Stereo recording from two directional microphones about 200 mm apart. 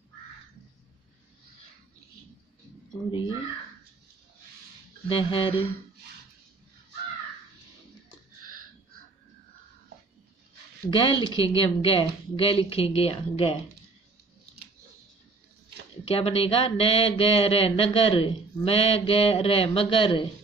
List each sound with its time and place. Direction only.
3.1 s speech: 25° left (ahead or behind)
5.0 s speech: 25° left (ahead or behind)
10.9 s speech: 25° left (ahead or behind)
16.1 s speech: 30° left (ahead or behind)